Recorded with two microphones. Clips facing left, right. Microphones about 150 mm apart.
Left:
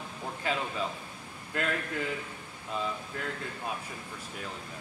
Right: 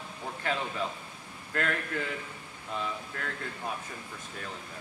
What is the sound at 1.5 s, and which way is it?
Speech, 20° left (ahead or behind).